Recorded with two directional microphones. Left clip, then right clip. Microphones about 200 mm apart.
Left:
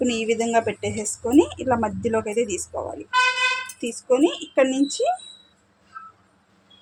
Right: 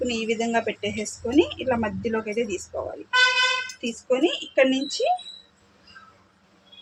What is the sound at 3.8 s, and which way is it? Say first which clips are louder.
A woman's voice: left 4 dB; 45° left (ahead or behind).